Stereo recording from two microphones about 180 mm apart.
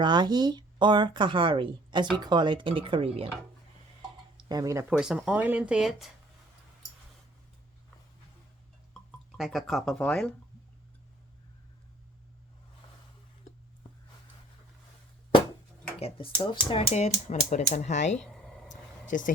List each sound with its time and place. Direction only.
0.0 s speech: 25° right (ahead or behind)
4.4 s speech: 20° right (ahead or behind)
4.9 s speech: 5° right (ahead or behind)
9.4 s speech: centre (ahead or behind)
16.0 s speech: 30° left (ahead or behind)
18.3 s a sound: 5° left (ahead or behind)
18.7 s a sound: 45° left (ahead or behind)